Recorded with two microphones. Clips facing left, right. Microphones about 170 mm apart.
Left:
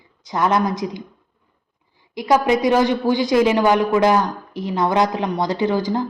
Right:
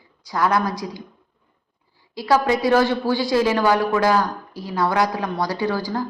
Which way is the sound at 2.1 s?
20° left (ahead or behind).